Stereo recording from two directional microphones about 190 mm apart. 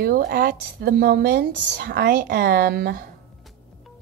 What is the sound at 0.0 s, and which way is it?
Speech, 50° right (ahead or behind).